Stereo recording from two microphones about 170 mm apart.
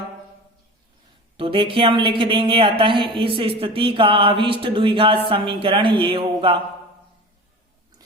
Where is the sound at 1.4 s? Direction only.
30° right (ahead or behind).